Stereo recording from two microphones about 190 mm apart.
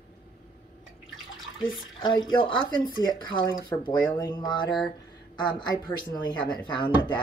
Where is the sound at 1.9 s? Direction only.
25° left (ahead or behind).